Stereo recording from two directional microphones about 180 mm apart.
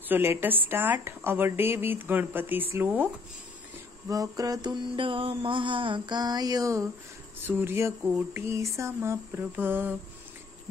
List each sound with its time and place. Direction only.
0.1 s speech: 10° right (ahead or behind)
4.1 s music: 20° right (ahead or behind)
7.4 s speech: 10° right (ahead or behind)